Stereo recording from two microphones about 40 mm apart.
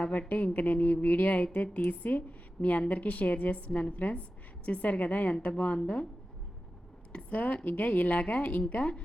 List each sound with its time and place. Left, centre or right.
0.0 s a woman's voice: left
7.1 s a woman's voice: left
8.8 s a woman's voice: left